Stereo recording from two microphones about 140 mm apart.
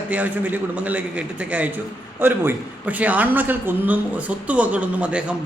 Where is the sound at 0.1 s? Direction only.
10° right (ahead or behind).